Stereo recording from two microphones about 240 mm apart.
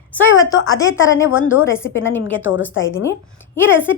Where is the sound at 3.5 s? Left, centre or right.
Centre.